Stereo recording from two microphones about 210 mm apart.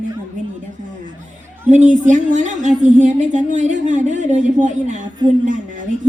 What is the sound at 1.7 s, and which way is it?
Speech, 35° right (ahead or behind).